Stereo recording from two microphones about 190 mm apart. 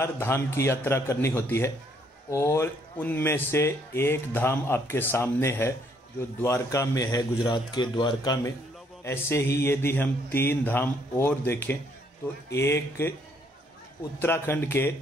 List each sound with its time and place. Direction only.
0.0 s speech: 15° left (ahead or behind)
14.2 s speech: 10° left (ahead or behind)